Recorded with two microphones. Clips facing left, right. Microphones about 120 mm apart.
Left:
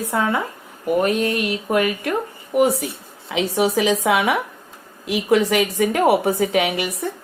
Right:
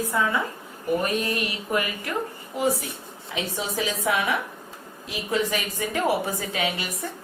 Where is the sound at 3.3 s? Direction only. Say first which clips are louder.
Left 10 dB; 85° left.